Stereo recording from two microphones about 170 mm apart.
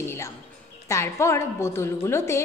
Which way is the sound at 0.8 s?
15° left (ahead or behind).